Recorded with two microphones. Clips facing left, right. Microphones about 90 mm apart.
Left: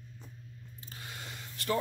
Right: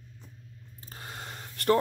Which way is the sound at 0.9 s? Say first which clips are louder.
Right 4 dB; 40° right (ahead or behind).